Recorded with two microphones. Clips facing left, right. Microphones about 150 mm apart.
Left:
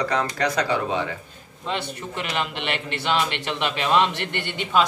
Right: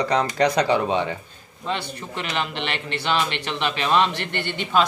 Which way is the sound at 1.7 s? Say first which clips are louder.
Even; 10° left (ahead or behind).